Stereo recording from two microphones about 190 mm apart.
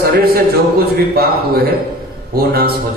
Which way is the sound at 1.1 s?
55° right (ahead or behind).